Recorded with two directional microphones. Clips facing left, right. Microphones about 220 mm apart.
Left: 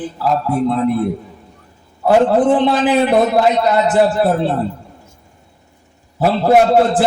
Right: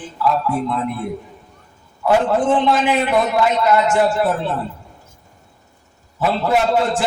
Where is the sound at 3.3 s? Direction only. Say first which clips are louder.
Left 2 dB; 35° left (ahead or behind).